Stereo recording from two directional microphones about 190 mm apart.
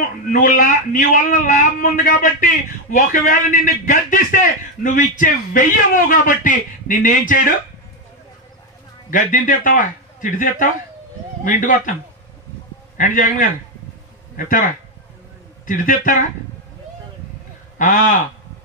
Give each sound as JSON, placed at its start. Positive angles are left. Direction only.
{"t": 0.3, "sound": "a man's voice", "side_deg": 45}
{"t": 9.1, "sound": "a man's voice", "side_deg": 45}
{"t": 12.9, "sound": "a man's voice", "side_deg": 45}
{"t": 17.7, "sound": "a man's voice", "side_deg": 45}